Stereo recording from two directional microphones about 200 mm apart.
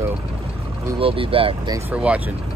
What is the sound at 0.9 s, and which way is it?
Speech, 30° right (ahead or behind).